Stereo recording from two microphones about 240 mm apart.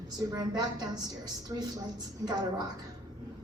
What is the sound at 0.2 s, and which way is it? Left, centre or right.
A woman's voice, centre.